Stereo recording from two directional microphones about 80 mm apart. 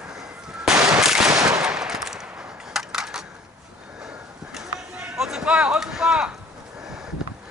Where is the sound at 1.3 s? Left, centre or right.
Right.